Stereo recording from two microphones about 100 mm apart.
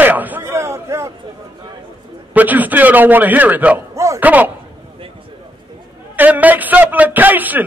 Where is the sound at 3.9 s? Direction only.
30° right (ahead or behind).